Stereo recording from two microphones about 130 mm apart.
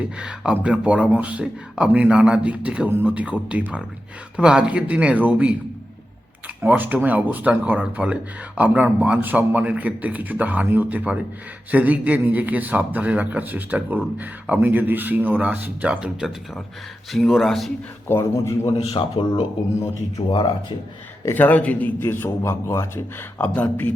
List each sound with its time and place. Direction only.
0.2 s speech: 5° right (ahead or behind)
6.6 s speech: 15° right (ahead or behind); by 17.7 s centre (ahead or behind)
18.1 s a man's voice: 20° left (ahead or behind)
18.8 s speech: 45° left (ahead or behind)
21.2 s a man's voice: 15° left (ahead or behind)